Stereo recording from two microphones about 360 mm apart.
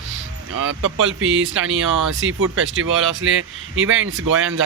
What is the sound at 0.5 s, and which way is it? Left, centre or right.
Speech, right.